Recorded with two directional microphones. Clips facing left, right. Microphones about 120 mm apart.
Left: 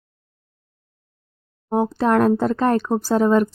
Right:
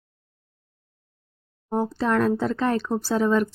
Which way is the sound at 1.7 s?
55° left (ahead or behind).